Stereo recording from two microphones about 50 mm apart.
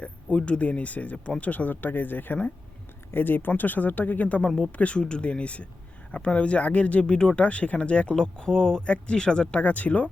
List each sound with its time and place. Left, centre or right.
0.0 s speech: left
4.4 s speech: centre
9.6 s speech: left